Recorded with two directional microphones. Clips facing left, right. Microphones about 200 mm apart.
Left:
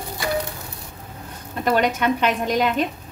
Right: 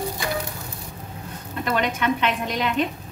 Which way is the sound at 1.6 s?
40° left (ahead or behind).